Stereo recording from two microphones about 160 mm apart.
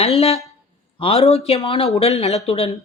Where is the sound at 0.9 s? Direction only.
35° left (ahead or behind).